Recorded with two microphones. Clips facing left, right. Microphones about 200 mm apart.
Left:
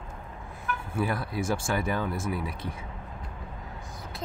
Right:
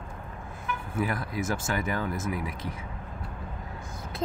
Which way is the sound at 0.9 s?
30° left (ahead or behind).